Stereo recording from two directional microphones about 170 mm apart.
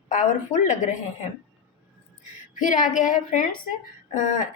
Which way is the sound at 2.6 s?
50° left (ahead or behind).